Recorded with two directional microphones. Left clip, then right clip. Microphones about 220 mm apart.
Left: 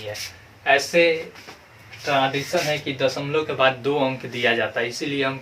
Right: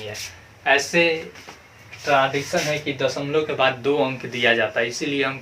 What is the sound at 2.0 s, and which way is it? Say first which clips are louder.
Speech: right 2 dB; 15° right (ahead or behind).